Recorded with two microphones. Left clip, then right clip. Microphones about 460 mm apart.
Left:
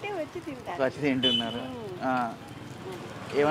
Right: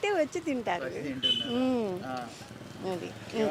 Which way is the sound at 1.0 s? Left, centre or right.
Left.